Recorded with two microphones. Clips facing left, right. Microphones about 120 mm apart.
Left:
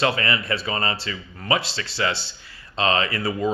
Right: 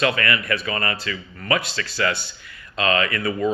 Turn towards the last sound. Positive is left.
turn(degrees=30)  # may be behind; listen again after turning